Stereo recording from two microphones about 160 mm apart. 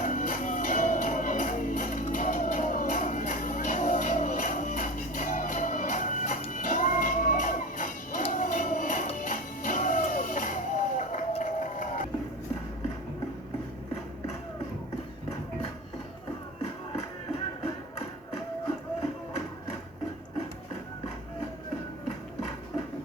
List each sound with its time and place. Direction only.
0.0 s music: 55° left (ahead or behind)